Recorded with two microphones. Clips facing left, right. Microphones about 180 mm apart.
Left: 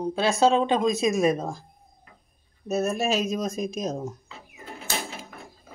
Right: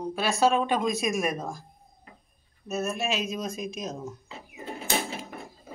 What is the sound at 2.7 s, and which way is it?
Speech, 35° left (ahead or behind).